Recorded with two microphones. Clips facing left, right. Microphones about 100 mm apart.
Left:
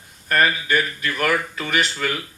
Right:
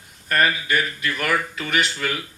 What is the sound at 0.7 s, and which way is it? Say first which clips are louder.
Speech: left 1 dB; 40° left (ahead or behind).